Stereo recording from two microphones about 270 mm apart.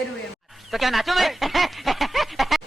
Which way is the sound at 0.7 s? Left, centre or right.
Centre.